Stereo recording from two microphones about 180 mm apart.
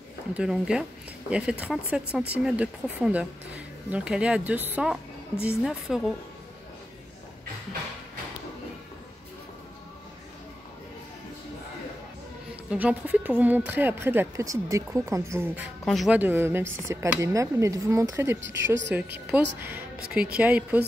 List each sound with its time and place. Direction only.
0.4 s speech: 5° right (ahead or behind)
12.6 s speech: 10° right (ahead or behind)
15.8 s speech: centre (ahead or behind)